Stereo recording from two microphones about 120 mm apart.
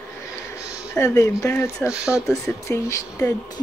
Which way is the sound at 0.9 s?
25° left (ahead or behind).